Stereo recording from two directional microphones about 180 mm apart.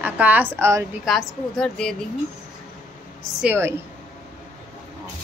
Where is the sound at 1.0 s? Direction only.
Centre (ahead or behind).